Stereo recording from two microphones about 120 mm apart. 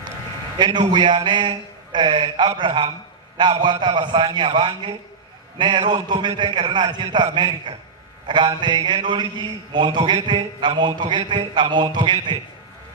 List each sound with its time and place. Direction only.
0.6 s speech: 40° right (ahead or behind)